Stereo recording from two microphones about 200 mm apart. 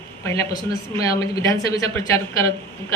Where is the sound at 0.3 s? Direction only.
15° left (ahead or behind).